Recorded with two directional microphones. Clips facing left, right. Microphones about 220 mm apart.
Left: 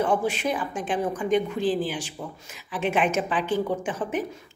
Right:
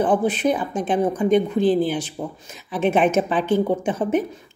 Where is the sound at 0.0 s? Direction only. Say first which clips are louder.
Right 5 dB; 20° right (ahead or behind).